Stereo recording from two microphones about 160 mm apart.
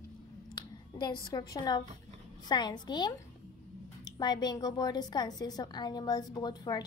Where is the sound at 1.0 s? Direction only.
25° left (ahead or behind).